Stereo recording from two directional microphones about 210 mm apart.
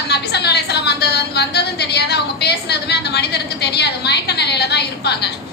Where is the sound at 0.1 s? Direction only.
50° left (ahead or behind).